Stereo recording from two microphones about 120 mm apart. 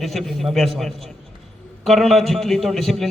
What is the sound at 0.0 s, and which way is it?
A man's voice, centre (ahead or behind).